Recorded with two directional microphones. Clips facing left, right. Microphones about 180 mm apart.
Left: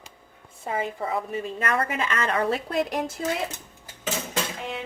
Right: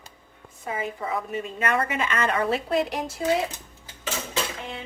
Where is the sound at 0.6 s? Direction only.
30° left (ahead or behind).